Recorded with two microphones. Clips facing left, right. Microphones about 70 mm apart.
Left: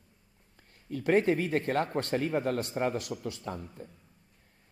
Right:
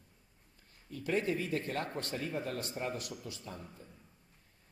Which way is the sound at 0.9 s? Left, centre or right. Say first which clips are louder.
Left 8 dB; left.